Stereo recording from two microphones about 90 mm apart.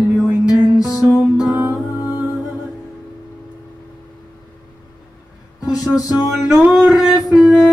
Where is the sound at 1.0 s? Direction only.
Centre (ahead or behind).